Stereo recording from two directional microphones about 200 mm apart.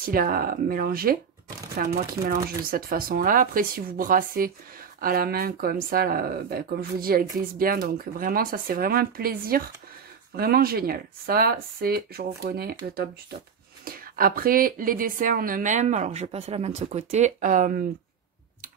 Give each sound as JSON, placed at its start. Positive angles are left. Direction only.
{"t": 0.0, "sound": "a woman's voice", "side_deg": -45}